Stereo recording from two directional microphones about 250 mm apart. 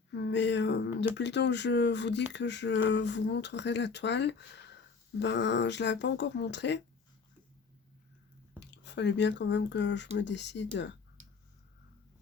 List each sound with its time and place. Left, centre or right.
0.1 s speech: left
8.6 s speech: left